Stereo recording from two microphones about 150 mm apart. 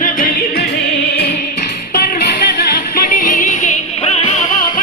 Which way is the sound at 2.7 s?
70° left (ahead or behind).